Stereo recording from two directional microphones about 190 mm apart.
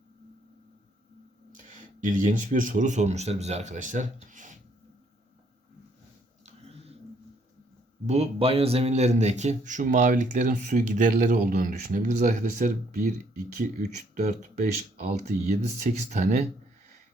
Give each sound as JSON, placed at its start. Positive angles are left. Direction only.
{"t": 1.5, "sound": "speech", "side_deg": -40}
{"t": 8.0, "sound": "speech", "side_deg": -35}